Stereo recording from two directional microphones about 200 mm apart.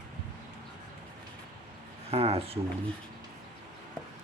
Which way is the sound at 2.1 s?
30° right (ahead or behind).